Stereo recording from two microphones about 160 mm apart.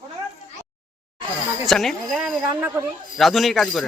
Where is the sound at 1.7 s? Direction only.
Centre (ahead or behind).